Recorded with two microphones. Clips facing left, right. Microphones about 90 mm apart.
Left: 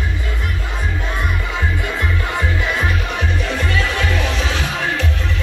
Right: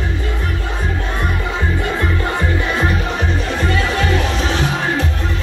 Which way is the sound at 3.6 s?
45° right (ahead or behind).